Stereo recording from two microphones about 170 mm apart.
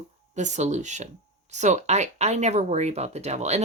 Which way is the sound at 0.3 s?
45° right (ahead or behind).